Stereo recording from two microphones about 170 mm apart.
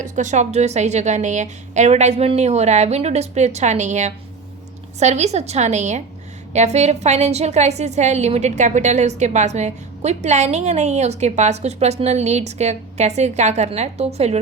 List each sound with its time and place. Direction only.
0.0 s a woman's voice: 45° right (ahead or behind)